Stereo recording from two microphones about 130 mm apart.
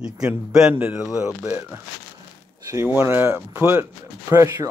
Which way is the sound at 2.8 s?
15° right (ahead or behind).